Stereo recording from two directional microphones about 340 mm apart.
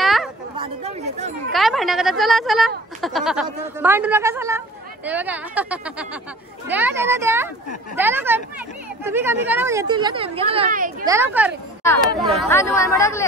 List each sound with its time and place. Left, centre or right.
0.0 s a sound: centre
0.6 s speech: centre
1.5 s speech: centre; by 11.1 s right
11.1 s speech: centre